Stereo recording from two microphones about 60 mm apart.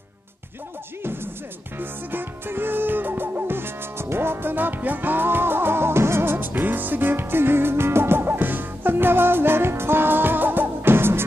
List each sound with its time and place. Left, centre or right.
1.8 s music: right